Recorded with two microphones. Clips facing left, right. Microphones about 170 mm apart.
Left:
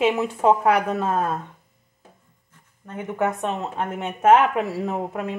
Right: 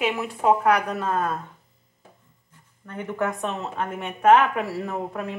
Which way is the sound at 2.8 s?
15° left (ahead or behind).